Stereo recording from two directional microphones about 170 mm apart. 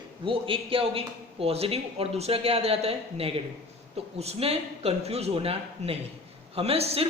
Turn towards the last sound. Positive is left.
turn(degrees=-35)  # may be behind; listen again after turning